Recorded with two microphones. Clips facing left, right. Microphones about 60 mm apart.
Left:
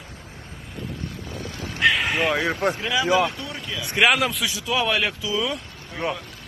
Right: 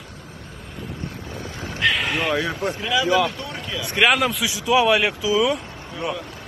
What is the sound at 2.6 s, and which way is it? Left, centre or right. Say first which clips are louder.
Speech: left 2 dB; left.